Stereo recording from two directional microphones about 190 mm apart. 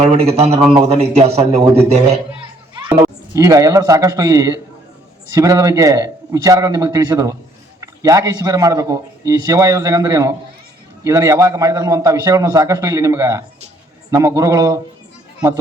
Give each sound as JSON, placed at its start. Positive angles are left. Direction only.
{"t": 0.0, "sound": "speech", "side_deg": -35}
{"t": 3.3, "sound": "a man's voice", "side_deg": -15}